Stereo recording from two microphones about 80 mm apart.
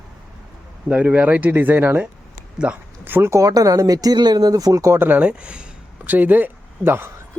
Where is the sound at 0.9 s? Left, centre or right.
Centre.